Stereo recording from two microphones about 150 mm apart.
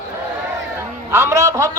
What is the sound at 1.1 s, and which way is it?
Speech, 15° right (ahead or behind).